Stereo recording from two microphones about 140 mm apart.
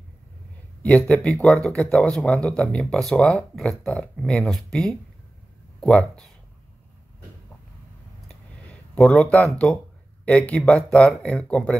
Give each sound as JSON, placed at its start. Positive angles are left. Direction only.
{"t": 0.8, "sound": "speech", "side_deg": 5}
{"t": 8.6, "sound": "speech", "side_deg": 5}